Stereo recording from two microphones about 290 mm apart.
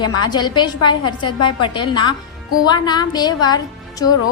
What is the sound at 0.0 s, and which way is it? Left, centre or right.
A woman's voice, centre.